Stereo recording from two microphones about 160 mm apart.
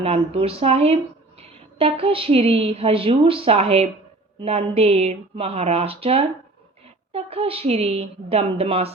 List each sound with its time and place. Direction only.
0.0 s a woman's voice: 40° right (ahead or behind)